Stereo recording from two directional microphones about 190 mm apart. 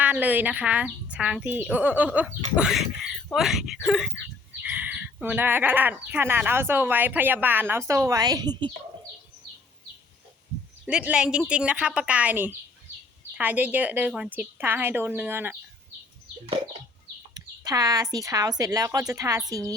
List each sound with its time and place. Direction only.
0.0 s a woman's voice: 10° right (ahead or behind)
10.8 s a woman's voice: 5° right (ahead or behind)
17.3 s speech: 20° right (ahead or behind)